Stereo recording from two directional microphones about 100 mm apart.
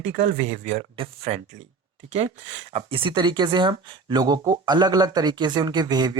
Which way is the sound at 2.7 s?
60° right (ahead or behind).